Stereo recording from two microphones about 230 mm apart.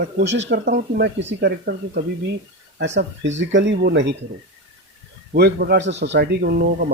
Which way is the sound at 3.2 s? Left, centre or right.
Right.